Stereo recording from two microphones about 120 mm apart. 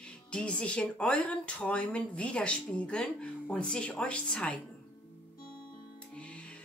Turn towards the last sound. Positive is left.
turn(degrees=10)  # may be behind; listen again after turning